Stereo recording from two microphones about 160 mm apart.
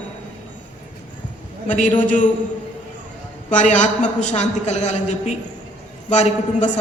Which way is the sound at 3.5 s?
50° left (ahead or behind).